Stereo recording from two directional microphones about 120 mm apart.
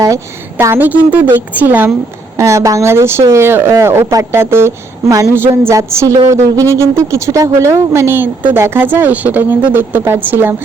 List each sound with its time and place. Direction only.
0.6 s a woman's voice: 20° right (ahead or behind)